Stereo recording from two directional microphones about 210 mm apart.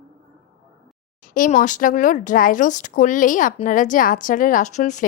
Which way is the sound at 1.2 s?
40° left (ahead or behind).